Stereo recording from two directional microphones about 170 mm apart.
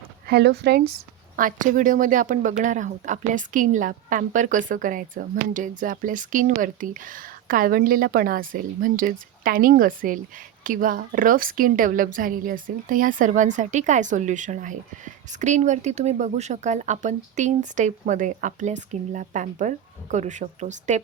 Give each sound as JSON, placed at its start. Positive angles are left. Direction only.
{"t": 0.3, "sound": "speech", "side_deg": -75}
{"t": 1.4, "sound": "a woman's voice", "side_deg": -50}